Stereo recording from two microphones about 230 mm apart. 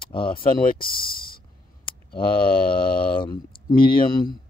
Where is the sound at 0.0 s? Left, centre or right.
Left.